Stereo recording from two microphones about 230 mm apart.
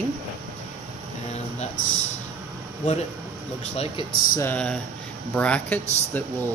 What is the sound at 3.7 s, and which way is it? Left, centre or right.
Speech, left.